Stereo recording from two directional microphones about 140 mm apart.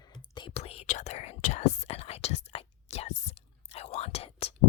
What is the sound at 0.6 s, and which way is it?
Whispering, 50° left (ahead or behind).